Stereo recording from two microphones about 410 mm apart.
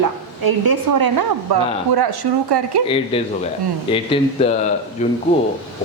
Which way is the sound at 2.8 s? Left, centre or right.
Centre.